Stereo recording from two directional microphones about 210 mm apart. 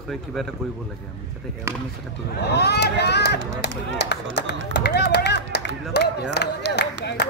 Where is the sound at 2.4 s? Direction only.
50° left (ahead or behind).